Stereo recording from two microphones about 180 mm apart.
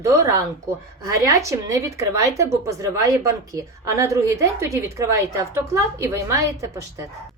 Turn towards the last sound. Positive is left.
turn(degrees=-15)  # may be behind; listen again after turning